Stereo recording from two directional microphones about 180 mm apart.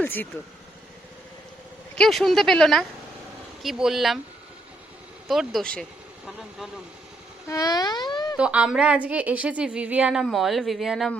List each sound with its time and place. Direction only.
0.0 s speech: 10° left (ahead or behind)
2.0 s a woman's voice: centre (ahead or behind)
5.3 s a woman's voice: centre (ahead or behind)
7.4 s speech: 20° left (ahead or behind)
8.4 s a woman's voice: 5° right (ahead or behind)